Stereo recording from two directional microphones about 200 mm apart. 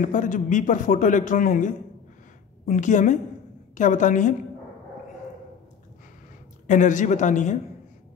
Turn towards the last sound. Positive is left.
turn(degrees=35)  # may be behind; listen again after turning